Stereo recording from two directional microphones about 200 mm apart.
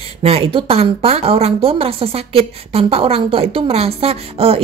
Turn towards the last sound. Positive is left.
turn(degrees=-30)  # may be behind; listen again after turning